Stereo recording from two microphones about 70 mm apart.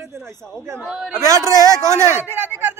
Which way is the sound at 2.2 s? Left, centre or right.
Right.